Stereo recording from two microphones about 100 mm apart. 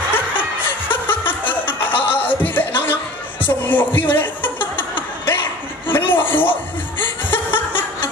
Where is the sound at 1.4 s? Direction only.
20° left (ahead or behind).